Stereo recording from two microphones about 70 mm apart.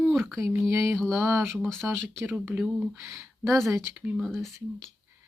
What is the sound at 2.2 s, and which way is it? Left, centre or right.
Speech, right.